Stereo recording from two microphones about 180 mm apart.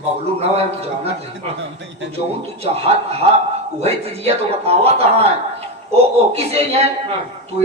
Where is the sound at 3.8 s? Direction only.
35° right (ahead or behind).